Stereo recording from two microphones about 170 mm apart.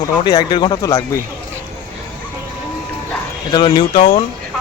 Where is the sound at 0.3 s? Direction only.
25° left (ahead or behind).